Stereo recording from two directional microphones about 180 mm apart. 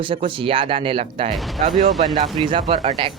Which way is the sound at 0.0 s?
30° right (ahead or behind).